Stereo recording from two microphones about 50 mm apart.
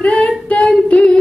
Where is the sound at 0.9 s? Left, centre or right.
Left.